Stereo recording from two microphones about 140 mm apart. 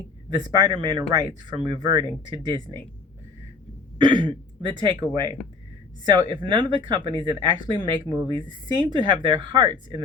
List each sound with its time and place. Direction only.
0.3 s speech: 30° right (ahead or behind)
3.9 s throat clearing: 35° right (ahead or behind)
4.8 s speech: 35° right (ahead or behind)
6.3 s speech: 35° right (ahead or behind)